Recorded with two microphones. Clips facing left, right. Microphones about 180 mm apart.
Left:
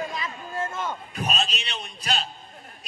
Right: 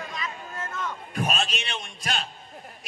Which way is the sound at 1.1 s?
50° right (ahead or behind).